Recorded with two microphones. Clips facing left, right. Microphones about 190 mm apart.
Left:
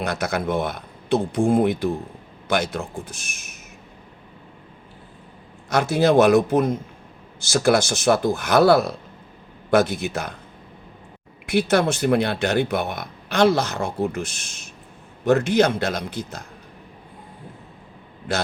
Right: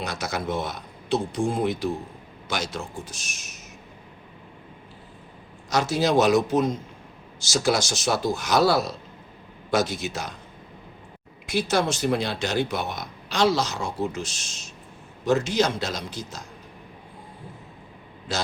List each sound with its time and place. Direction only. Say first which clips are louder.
0.0 s speech: left 5 dB; 55° left (ahead or behind)
5.7 s speech: left 4 dB; 55° left (ahead or behind)
11.4 s speech: left 5 dB; 60° left (ahead or behind)
18.3 s speech: left 4 dB; 60° left (ahead or behind)